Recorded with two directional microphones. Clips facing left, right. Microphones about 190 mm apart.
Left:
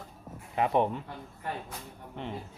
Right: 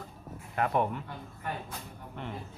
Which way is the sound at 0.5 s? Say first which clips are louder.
Left 2 dB; 20° left (ahead or behind).